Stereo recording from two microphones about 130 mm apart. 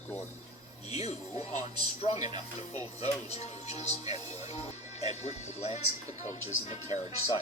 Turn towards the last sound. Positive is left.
turn(degrees=50)  # may be behind; listen again after turning